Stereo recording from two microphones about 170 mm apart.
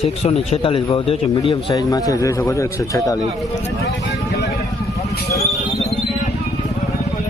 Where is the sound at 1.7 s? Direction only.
20° left (ahead or behind).